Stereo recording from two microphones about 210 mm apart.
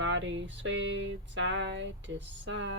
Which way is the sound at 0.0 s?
60° right (ahead or behind).